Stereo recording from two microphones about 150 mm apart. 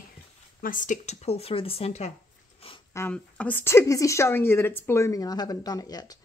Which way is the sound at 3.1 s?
10° left (ahead or behind).